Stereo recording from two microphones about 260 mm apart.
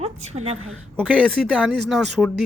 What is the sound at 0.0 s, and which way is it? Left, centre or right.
Speech, right.